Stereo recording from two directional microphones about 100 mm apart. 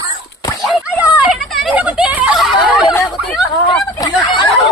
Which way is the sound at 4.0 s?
40° left (ahead or behind).